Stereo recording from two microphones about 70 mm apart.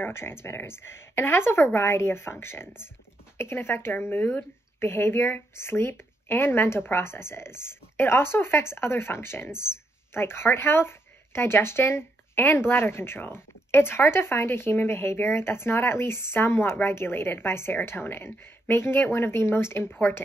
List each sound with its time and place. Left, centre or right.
0.0 s speech: left